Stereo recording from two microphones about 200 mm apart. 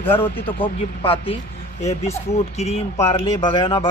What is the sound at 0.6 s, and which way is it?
Speech, 25° left (ahead or behind).